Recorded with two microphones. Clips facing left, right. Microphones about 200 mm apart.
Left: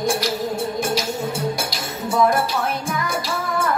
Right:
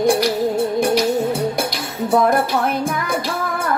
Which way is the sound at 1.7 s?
55° right (ahead or behind).